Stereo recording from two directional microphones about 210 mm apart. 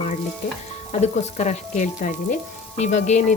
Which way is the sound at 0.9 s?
30° left (ahead or behind).